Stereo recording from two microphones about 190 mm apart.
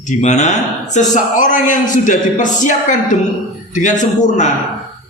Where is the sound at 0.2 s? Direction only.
40° left (ahead or behind).